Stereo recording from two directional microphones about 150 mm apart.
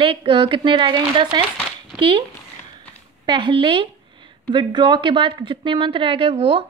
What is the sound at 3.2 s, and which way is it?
A woman's voice, 30° right (ahead or behind).